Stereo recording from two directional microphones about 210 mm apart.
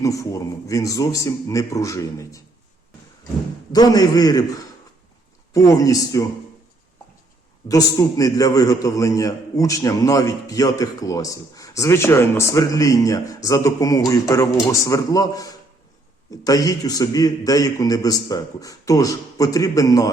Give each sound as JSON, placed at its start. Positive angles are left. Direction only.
{"t": 0.0, "sound": "a man's voice", "side_deg": 15}
{"t": 3.7, "sound": "a man's voice", "side_deg": 20}
{"t": 5.5, "sound": "a man's voice", "side_deg": 15}
{"t": 7.7, "sound": "a man's voice", "side_deg": 15}